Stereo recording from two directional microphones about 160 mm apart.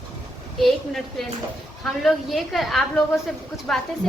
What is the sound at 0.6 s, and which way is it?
Speech, centre (ahead or behind).